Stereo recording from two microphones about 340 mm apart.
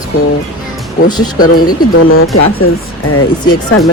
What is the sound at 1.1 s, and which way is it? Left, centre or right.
Speech, centre.